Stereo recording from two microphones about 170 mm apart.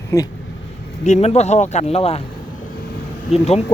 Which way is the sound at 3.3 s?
40° left (ahead or behind).